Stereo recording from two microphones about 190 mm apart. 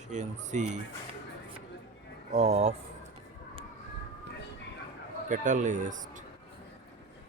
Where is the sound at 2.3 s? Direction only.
35° right (ahead or behind).